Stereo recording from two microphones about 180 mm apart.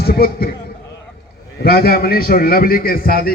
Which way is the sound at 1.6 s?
60° left (ahead or behind).